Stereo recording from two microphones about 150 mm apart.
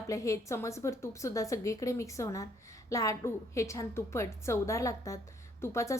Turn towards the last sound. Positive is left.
turn(degrees=20)  # may be behind; listen again after turning